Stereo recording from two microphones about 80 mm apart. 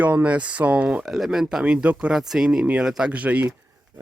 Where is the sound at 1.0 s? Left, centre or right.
Centre.